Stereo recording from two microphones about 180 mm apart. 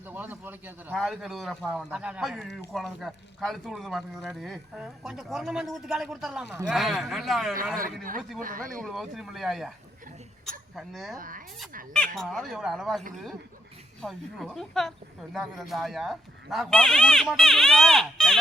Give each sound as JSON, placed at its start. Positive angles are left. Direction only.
{"t": 0.1, "sound": "speech", "side_deg": -10}
{"t": 8.4, "sound": "speech", "side_deg": -50}
{"t": 8.8, "sound": "speech", "side_deg": 0}
{"t": 10.8, "sound": "speech", "side_deg": 0}
{"t": 11.2, "sound": "speech", "side_deg": -50}
{"t": 11.9, "sound": "speech", "side_deg": 0}